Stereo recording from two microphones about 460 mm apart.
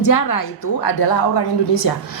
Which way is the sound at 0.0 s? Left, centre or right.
Left.